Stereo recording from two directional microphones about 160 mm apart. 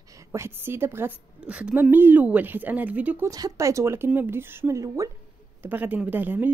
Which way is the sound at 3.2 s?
20° right (ahead or behind).